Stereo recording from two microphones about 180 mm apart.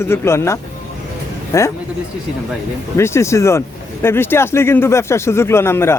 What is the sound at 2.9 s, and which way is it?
Speech, 15° left (ahead or behind).